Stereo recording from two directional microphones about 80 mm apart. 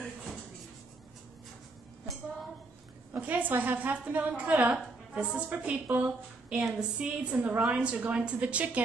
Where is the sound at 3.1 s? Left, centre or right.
Right.